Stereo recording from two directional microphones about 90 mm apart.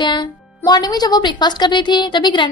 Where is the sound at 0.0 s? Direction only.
65° left (ahead or behind).